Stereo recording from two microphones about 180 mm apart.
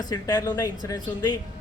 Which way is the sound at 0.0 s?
20° left (ahead or behind).